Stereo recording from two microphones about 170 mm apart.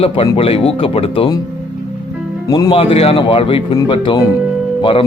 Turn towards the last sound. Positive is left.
turn(degrees=30)  # may be behind; listen again after turning